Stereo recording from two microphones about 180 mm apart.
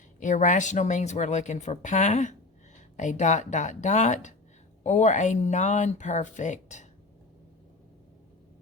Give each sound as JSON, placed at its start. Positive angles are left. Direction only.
{"t": 0.2, "sound": "speech", "side_deg": 45}